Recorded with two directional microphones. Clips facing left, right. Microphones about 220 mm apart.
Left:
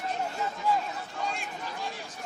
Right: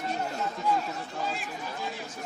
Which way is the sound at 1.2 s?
5° right (ahead or behind).